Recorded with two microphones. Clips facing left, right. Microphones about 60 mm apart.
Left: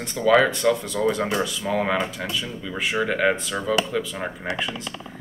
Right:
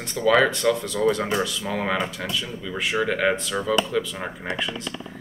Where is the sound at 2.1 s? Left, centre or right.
Left.